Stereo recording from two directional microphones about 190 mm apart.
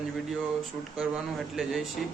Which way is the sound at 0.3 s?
Centre (ahead or behind).